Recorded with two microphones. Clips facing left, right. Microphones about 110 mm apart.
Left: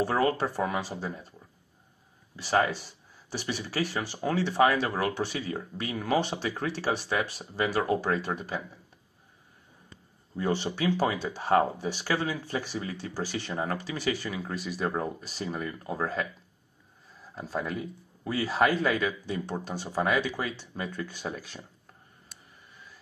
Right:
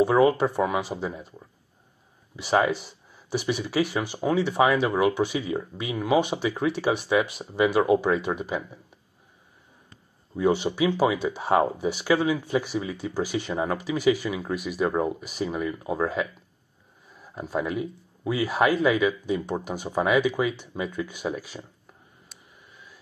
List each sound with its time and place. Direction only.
0.0 s speech: 15° right (ahead or behind)
2.3 s speech: 15° right (ahead or behind)
10.3 s speech: 10° right (ahead or behind)
17.4 s speech: 10° right (ahead or behind)